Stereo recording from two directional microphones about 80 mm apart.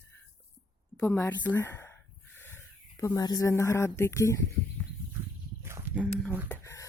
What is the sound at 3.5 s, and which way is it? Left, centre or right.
Speech, left.